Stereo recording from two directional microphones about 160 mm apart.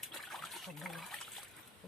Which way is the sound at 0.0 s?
Centre (ahead or behind).